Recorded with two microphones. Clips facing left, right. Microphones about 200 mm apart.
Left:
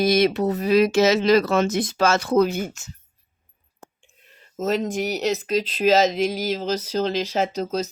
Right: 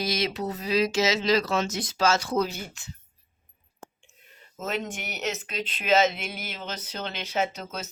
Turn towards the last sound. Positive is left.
turn(degrees=40)  # may be behind; listen again after turning